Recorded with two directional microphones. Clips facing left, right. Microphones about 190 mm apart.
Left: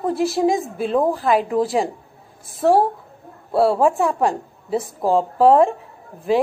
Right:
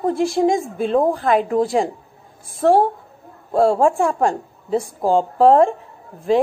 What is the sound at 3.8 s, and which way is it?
A woman's voice, 30° right (ahead or behind).